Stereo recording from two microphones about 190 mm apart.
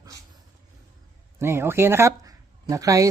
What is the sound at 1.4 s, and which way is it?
Speech, 15° right (ahead or behind).